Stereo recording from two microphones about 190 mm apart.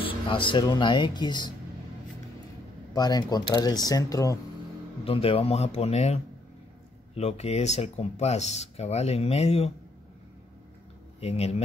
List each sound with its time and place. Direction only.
0.0 s speech: 25° left (ahead or behind)
2.9 s speech: 20° left (ahead or behind)
5.0 s speech: 30° left (ahead or behind)
11.1 s speech: 35° left (ahead or behind)